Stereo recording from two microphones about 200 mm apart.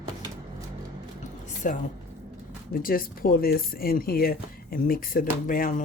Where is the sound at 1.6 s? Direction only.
40° left (ahead or behind).